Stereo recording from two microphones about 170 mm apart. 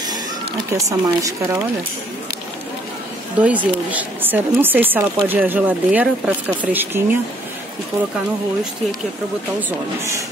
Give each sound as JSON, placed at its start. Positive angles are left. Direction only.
{"t": 0.0, "sound": "a sound", "side_deg": -25}
{"t": 0.8, "sound": "speech", "side_deg": -20}
{"t": 3.4, "sound": "speech", "side_deg": -10}
{"t": 9.6, "sound": "speech", "side_deg": -15}